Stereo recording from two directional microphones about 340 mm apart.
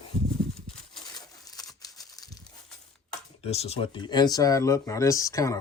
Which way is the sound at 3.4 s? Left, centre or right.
Centre.